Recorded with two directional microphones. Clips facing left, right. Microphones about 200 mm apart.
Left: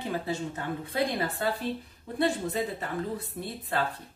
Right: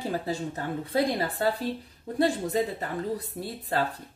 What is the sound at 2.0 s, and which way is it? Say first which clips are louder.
Speech: right 2 dB; 40° right (ahead or behind).